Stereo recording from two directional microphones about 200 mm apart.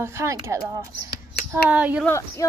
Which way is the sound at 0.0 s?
15° right (ahead or behind).